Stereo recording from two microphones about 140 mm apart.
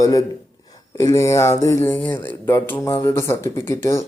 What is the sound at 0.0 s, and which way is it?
A man's voice, 25° left (ahead or behind).